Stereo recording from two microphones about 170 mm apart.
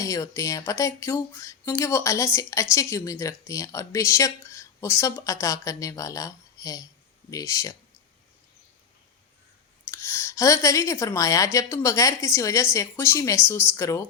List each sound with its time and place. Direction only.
0.0 s speech: 20° left (ahead or behind)
9.8 s a woman's voice: 15° left (ahead or behind)